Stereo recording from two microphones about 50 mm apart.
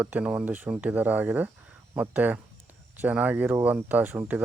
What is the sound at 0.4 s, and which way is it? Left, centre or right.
Speech, right.